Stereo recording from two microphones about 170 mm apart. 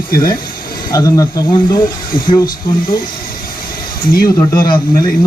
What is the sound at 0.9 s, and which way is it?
Speech, 20° left (ahead or behind).